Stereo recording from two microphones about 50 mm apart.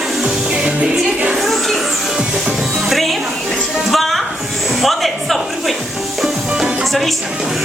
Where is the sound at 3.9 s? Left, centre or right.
Centre.